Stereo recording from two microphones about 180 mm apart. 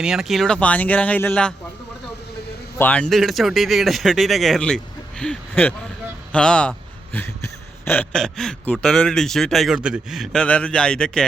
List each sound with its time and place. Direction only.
0.0 s speech: 5° right (ahead or behind)
2.7 s speech: 10° left (ahead or behind)